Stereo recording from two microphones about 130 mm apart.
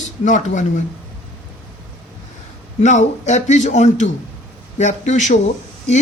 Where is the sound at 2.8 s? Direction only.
65° left (ahead or behind).